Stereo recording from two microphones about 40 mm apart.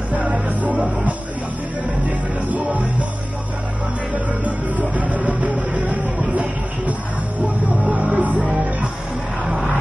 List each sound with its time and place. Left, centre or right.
0.1 s music: right
4.7 s music: right